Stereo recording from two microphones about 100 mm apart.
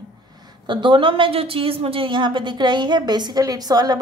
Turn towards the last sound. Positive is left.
turn(degrees=-40)  # may be behind; listen again after turning